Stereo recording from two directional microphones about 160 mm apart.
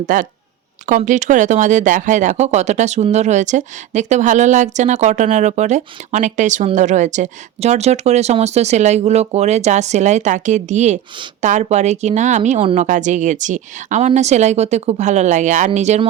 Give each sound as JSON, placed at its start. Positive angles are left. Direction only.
{"t": 0.0, "sound": "speech", "side_deg": -55}